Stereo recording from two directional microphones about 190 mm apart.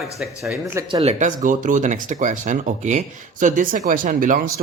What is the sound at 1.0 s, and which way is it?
Speech, 40° right (ahead or behind).